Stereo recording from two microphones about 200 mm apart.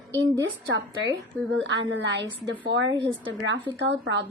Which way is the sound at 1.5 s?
65° right (ahead or behind).